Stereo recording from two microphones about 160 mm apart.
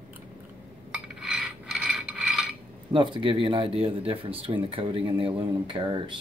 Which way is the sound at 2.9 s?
30° right (ahead or behind).